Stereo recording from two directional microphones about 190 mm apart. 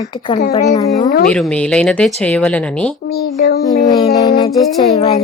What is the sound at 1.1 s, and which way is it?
Speech, 50° left (ahead or behind).